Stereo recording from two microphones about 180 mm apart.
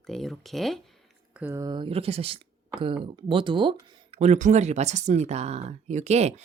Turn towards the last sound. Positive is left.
turn(degrees=-35)  # may be behind; listen again after turning